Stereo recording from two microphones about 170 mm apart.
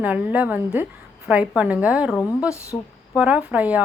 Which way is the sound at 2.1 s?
15° left (ahead or behind).